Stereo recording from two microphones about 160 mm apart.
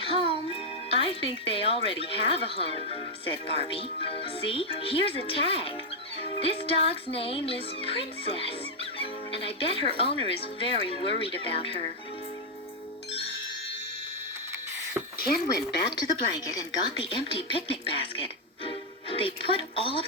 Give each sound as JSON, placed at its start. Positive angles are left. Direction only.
{"t": 0.0, "sound": "a child's voice", "side_deg": 35}
{"t": 15.3, "sound": "speech", "side_deg": 75}
{"t": 17.0, "sound": "a child's voice", "side_deg": 35}
{"t": 18.2, "sound": "music", "side_deg": 35}
{"t": 19.5, "sound": "a child's voice", "side_deg": 35}